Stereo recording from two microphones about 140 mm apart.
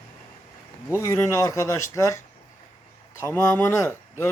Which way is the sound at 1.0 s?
20° left (ahead or behind).